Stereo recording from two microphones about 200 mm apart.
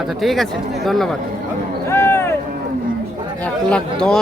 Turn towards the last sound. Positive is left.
turn(degrees=5)  # may be behind; listen again after turning